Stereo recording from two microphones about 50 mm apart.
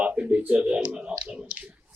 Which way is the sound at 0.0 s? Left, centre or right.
Right.